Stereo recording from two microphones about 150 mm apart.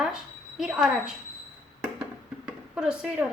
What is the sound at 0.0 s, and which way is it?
Speech, 5° right (ahead or behind).